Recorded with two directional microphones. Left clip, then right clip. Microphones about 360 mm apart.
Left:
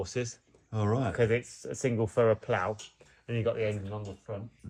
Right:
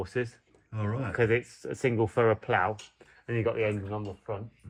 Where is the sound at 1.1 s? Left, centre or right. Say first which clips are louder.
Right 6 dB; right.